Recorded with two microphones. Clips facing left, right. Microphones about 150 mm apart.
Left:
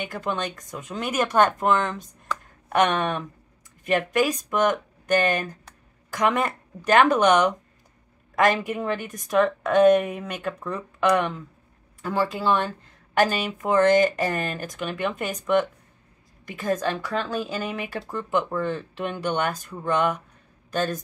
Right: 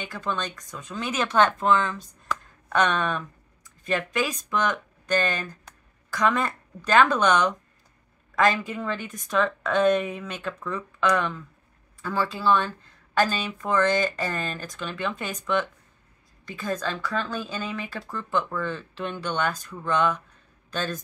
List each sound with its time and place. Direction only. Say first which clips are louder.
0.0 s speech: left 2 dB; 15° left (ahead or behind)
8.5 s speech: left 3 dB; 15° left (ahead or behind)
16.6 s speech: left 4 dB; 15° left (ahead or behind)